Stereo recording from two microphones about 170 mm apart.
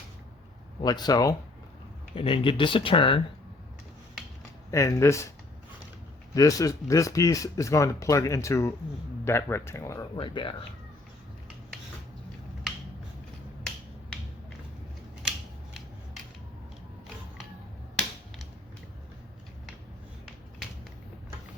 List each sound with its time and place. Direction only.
0.8 s speech: 25° left (ahead or behind)
4.7 s speech: 15° left (ahead or behind)
6.3 s speech: 20° left (ahead or behind)
10.2 s speech: 30° left (ahead or behind)